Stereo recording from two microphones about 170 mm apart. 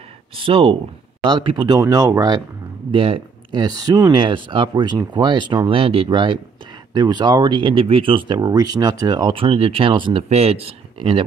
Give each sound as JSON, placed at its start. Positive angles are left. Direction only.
{"t": 0.4, "sound": "speech", "side_deg": -35}